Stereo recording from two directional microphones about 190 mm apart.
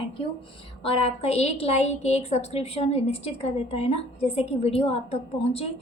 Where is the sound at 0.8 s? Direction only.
30° left (ahead or behind).